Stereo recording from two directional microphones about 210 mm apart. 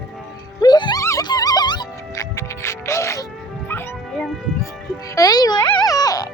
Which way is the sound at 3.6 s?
5° left (ahead or behind).